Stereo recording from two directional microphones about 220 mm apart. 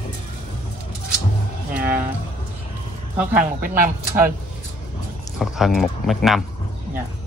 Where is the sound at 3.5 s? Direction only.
40° right (ahead or behind).